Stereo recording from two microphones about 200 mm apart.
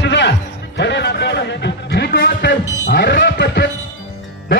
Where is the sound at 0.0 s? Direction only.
60° left (ahead or behind).